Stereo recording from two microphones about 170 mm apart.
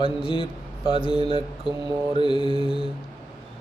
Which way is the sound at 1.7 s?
30° left (ahead or behind).